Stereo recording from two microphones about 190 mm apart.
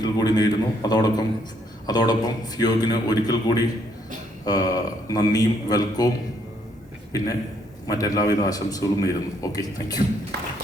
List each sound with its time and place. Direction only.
0.0 s a man's voice: 20° left (ahead or behind)
7.1 s a man's voice: 20° left (ahead or behind)